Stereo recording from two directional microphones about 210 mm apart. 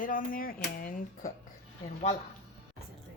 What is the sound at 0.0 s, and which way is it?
Speech, 40° left (ahead or behind).